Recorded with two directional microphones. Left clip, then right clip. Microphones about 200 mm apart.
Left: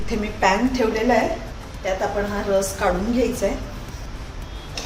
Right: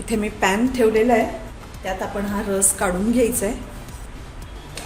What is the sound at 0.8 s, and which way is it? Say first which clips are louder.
Speech: right 8 dB; 60° right (ahead or behind).